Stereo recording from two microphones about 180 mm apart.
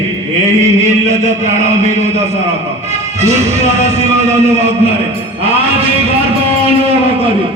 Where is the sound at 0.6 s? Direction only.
40° right (ahead or behind).